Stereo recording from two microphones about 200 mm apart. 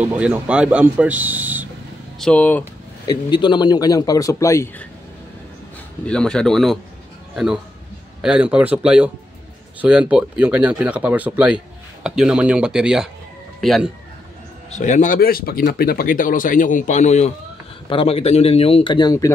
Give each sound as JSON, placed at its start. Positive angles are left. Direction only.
{"t": 0.0, "sound": "speech", "side_deg": -10}
{"t": 2.1, "sound": "speech", "side_deg": 5}
{"t": 3.1, "sound": "speech", "side_deg": 25}
{"t": 6.0, "sound": "speech", "side_deg": 5}
{"t": 14.7, "sound": "speech", "side_deg": 40}